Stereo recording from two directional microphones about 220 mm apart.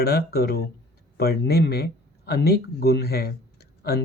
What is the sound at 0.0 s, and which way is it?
A man's voice, 45° left (ahead or behind).